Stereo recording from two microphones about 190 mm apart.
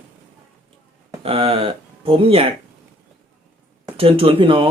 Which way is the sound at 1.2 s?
30° right (ahead or behind).